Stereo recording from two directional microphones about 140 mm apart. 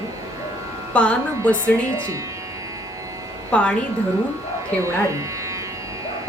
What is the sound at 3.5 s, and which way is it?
Speech, 10° left (ahead or behind).